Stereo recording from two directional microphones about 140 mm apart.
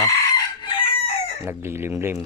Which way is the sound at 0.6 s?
35° left (ahead or behind).